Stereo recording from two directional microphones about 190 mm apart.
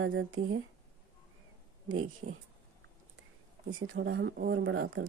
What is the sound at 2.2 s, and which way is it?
Speech, 55° right (ahead or behind).